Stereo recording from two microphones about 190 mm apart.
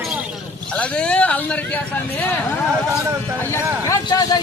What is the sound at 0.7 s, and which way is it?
Speech, 5° left (ahead or behind).